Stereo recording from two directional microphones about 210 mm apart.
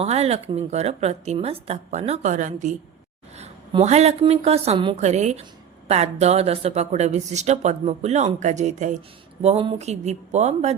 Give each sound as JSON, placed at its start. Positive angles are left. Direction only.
{"t": 0.0, "sound": "a woman's voice", "side_deg": -30}